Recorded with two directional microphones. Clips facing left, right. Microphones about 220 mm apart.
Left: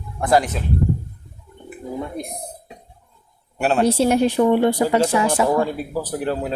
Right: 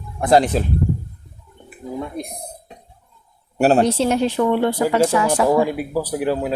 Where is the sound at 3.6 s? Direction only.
40° right (ahead or behind).